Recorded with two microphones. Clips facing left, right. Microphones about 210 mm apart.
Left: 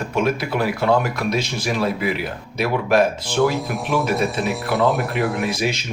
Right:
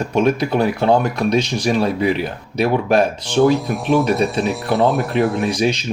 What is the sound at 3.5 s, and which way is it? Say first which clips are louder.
Speech: right 5 dB; centre (ahead or behind).